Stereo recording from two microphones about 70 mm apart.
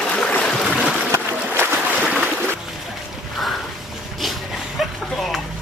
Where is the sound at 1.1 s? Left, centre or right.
Right.